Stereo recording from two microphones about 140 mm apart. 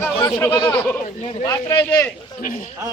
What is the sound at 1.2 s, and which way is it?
Speech, 50° left (ahead or behind).